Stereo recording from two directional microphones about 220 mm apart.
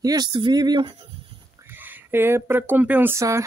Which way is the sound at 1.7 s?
10° right (ahead or behind).